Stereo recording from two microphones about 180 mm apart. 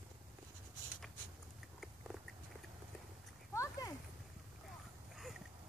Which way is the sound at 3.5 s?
15° left (ahead or behind).